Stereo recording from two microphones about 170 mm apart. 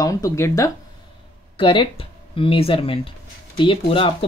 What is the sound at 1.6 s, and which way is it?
Speech, 30° left (ahead or behind).